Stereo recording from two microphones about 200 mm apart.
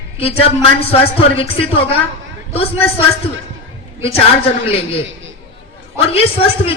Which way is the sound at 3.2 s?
30° left (ahead or behind).